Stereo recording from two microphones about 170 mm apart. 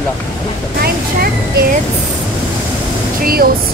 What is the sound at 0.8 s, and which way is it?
Speech, 65° right (ahead or behind).